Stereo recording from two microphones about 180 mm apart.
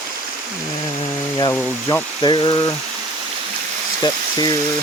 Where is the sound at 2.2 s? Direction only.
30° left (ahead or behind).